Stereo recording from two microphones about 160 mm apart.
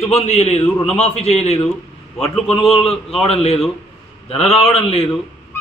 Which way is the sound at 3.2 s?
40° left (ahead or behind).